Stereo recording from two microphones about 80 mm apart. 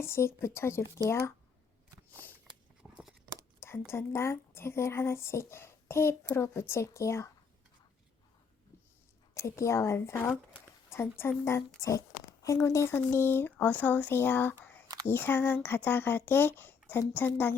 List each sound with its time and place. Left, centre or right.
0.0 s speech: left
2.8 s a sound: right
3.6 s speech: left
9.3 s a woman's voice: left
11.8 s speech: left